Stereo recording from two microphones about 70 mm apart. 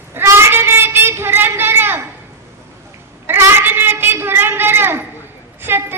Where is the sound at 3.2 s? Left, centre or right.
Right.